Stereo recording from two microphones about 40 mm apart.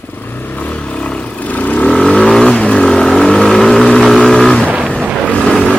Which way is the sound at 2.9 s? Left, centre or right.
Centre.